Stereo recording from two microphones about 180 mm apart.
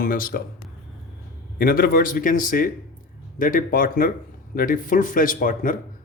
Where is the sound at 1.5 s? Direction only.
55° left (ahead or behind).